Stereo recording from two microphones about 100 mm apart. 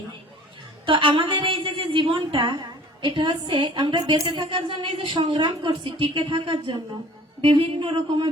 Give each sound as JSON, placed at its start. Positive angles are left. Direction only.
{"t": 0.9, "sound": "a woman's voice", "side_deg": -55}